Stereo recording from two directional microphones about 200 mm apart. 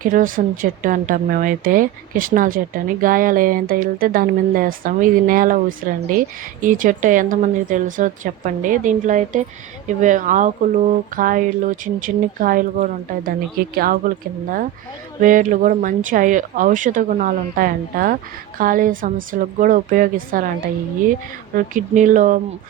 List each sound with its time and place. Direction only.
0.0 s speech: 45° right (ahead or behind)
15.2 s speech: 40° right (ahead or behind)
21.5 s speech: 40° right (ahead or behind)